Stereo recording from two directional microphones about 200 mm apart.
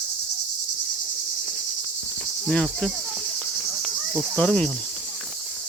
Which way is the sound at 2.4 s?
5° left (ahead or behind).